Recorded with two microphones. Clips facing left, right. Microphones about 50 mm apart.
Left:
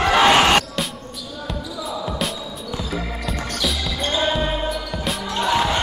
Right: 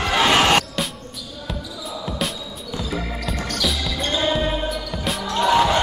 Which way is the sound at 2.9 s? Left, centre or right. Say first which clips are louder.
Right 1 dB; centre.